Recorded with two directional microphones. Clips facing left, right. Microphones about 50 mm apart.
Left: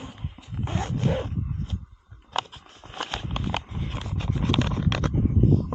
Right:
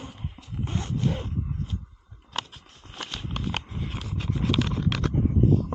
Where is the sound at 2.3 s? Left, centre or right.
Centre.